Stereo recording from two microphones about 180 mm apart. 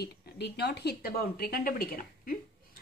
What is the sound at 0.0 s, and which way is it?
A woman's voice, 60° left (ahead or behind).